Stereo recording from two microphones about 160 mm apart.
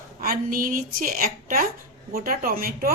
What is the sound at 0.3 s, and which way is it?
A woman's voice, 60° right (ahead or behind).